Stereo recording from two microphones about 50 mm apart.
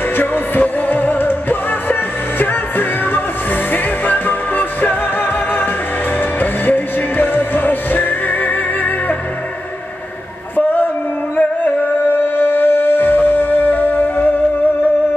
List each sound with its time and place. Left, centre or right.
0.2 s music: left
11.3 s music: left